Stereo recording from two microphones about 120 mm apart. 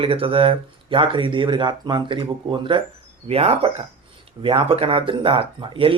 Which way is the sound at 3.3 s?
55° right (ahead or behind).